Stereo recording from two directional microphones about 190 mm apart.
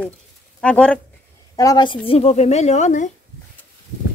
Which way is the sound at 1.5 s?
20° left (ahead or behind).